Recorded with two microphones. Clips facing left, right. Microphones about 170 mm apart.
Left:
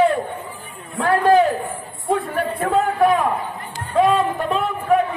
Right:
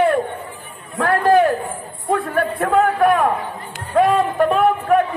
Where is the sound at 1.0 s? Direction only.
55° right (ahead or behind).